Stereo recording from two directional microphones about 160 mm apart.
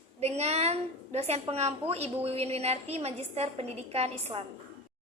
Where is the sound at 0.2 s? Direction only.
40° right (ahead or behind).